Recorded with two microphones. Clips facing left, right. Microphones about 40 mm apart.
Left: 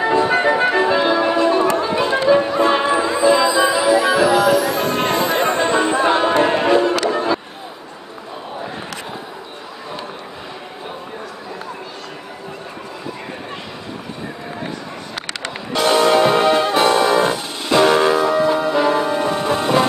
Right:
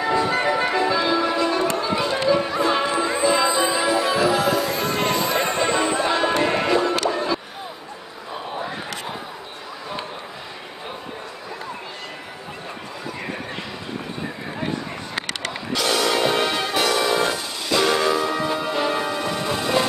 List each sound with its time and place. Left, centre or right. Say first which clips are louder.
0.0 s music: left 5 dB; left
15.7 s music: left 7 dB; left